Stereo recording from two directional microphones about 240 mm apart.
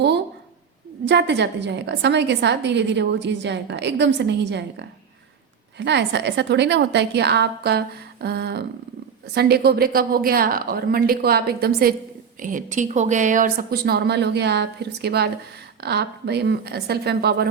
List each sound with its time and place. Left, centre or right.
1.0 s a woman's voice: right